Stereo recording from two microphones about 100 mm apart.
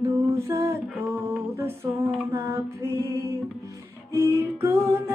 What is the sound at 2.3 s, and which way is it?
Music, 25° right (ahead or behind).